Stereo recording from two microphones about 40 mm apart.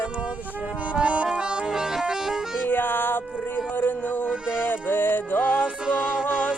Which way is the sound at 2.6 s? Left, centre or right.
Left.